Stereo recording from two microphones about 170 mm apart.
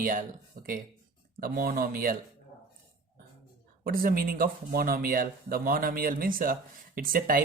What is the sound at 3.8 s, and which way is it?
Speech, 55° right (ahead or behind).